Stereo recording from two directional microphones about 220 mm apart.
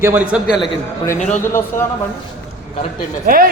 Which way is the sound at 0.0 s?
10° right (ahead or behind).